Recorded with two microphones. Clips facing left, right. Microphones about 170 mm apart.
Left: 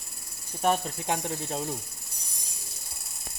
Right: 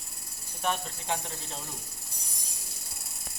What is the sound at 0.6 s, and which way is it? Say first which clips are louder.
Speech: left 6 dB; 45° left (ahead or behind).